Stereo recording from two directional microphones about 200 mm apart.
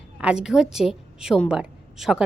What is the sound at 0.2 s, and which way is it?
A woman's voice, 5° right (ahead or behind).